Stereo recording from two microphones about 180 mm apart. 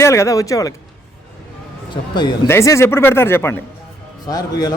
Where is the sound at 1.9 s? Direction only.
25° left (ahead or behind).